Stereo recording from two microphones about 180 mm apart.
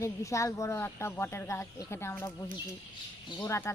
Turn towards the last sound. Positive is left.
turn(degrees=20)  # may be behind; listen again after turning